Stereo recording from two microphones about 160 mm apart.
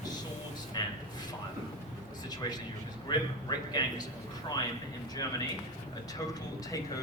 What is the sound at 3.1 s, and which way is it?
Speech, 25° left (ahead or behind).